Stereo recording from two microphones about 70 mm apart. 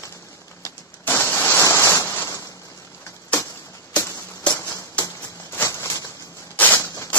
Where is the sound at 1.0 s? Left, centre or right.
Left.